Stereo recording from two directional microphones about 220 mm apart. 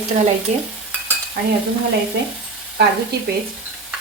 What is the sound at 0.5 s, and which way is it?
Speech, 30° right (ahead or behind).